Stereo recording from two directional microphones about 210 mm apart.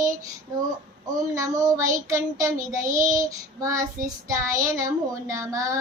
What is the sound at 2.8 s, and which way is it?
Child singing, 40° right (ahead or behind).